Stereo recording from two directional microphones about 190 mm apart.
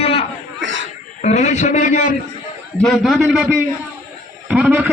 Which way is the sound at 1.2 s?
35° left (ahead or behind).